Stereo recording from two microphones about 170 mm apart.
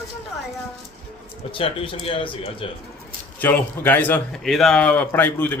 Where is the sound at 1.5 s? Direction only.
30° left (ahead or behind).